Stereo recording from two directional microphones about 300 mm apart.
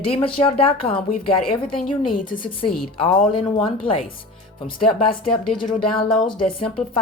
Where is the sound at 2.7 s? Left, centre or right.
Left.